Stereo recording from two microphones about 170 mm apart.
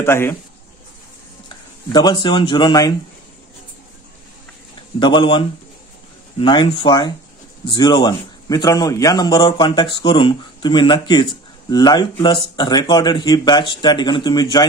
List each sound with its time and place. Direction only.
0.0 s speech: 15° left (ahead or behind)
1.9 s a man's voice: 25° left (ahead or behind)
4.9 s a man's voice: 30° left (ahead or behind)